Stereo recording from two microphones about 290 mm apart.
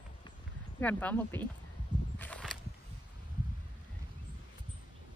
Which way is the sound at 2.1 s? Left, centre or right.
Centre.